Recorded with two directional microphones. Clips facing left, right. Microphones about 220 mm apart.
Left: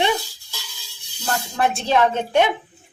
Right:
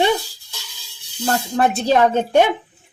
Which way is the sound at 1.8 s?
40° right (ahead or behind).